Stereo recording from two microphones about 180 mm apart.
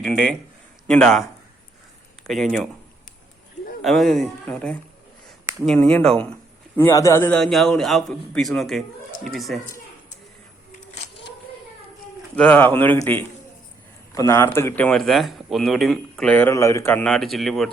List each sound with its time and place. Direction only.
0.0 s a man's voice: 50° right (ahead or behind)
0.9 s speech: 5° left (ahead or behind)
2.2 s speech: centre (ahead or behind)
3.8 s speech: centre (ahead or behind)
12.4 s speech: 10° left (ahead or behind)